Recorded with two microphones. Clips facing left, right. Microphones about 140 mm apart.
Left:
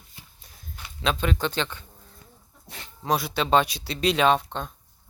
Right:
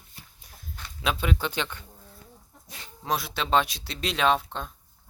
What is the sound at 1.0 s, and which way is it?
Speech, 10° right (ahead or behind).